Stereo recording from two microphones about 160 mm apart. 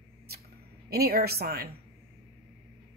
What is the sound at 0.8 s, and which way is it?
Speech, 75° right (ahead or behind).